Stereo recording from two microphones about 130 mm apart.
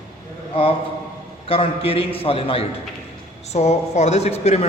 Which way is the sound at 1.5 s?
45° left (ahead or behind).